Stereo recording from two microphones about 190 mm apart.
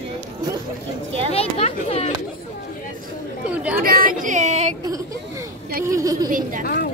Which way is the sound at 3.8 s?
50° right (ahead or behind).